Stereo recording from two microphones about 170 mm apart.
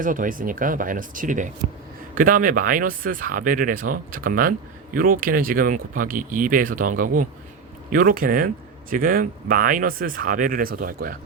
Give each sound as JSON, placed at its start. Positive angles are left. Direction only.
{"t": 0.0, "sound": "speech", "side_deg": -50}